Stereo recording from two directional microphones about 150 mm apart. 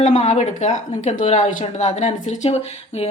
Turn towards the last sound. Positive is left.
turn(degrees=45)  # may be behind; listen again after turning